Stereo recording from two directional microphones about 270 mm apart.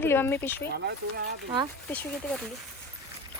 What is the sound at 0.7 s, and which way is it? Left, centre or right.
Speech, right.